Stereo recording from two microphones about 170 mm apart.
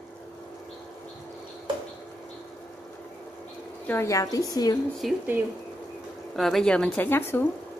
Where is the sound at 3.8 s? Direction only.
15° left (ahead or behind).